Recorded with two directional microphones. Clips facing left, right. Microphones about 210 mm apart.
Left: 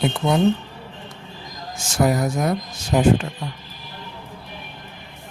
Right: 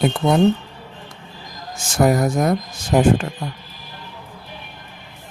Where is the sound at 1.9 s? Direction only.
50° right (ahead or behind).